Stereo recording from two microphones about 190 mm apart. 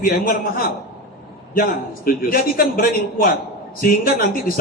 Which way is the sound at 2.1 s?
50° left (ahead or behind).